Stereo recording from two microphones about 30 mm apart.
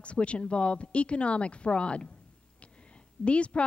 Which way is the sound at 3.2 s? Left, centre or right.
Left.